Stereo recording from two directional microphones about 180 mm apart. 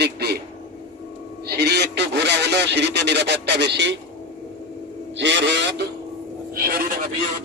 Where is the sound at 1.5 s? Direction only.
65° right (ahead or behind).